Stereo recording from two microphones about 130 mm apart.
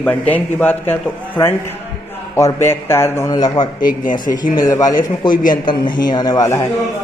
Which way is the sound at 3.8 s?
90° left.